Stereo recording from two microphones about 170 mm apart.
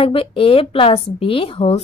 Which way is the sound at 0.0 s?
35° left (ahead or behind).